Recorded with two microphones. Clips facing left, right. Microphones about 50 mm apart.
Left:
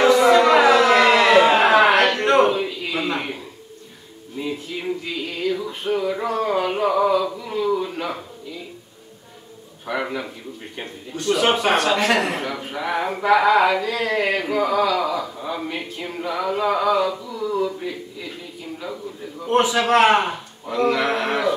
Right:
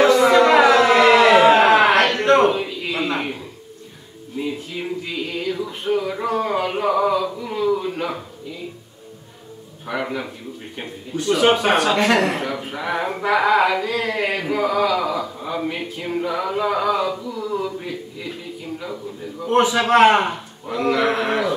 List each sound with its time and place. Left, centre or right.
0.0 s a sound: centre
4.4 s music: centre
9.8 s a man's voice: centre
19.4 s a man's voice: centre